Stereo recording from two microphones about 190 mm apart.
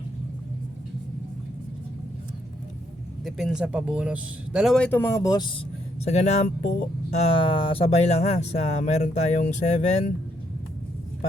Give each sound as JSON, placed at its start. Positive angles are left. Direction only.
{"t": 3.2, "sound": "speech", "side_deg": 0}
{"t": 6.1, "sound": "speech", "side_deg": 35}